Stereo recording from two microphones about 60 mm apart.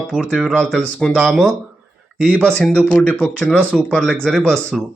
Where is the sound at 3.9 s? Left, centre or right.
Centre.